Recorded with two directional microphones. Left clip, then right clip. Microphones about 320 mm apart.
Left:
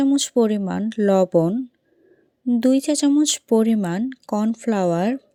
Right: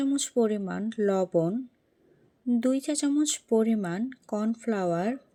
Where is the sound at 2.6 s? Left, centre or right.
Left.